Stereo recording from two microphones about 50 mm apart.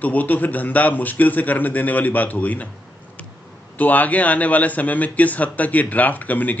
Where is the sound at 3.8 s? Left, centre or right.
Left.